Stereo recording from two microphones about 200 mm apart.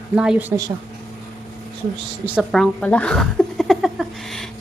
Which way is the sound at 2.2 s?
Centre (ahead or behind).